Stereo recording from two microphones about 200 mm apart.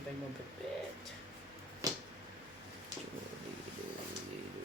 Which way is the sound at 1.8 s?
20° right (ahead or behind).